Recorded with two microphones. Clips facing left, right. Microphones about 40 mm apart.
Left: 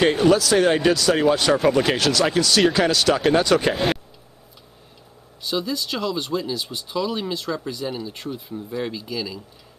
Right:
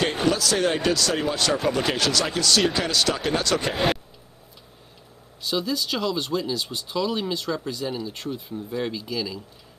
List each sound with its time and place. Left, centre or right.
0.2 s speech: centre
5.5 s speech: centre